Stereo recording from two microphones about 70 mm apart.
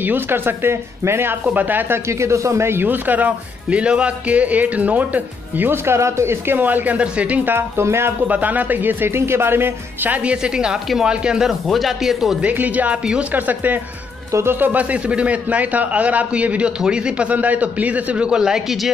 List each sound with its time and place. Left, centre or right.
0.0 s speech: right
2.0 s a man's voice: right
5.9 s a man's voice: right
7.5 s speech: right
8.3 s a man's voice: right
10.3 s speech: centre
12.4 s a man's voice: right
13.3 s a man's voice: right; by 18.9 s centre